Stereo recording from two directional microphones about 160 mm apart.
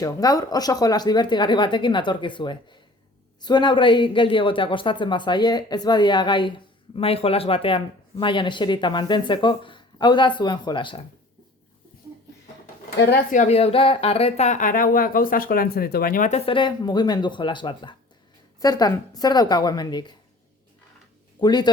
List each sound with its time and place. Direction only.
0.0 s speech: 20° left (ahead or behind)
13.3 s speech: 45° left (ahead or behind)
16.5 s speech: 30° left (ahead or behind)
21.4 s speech: 25° left (ahead or behind)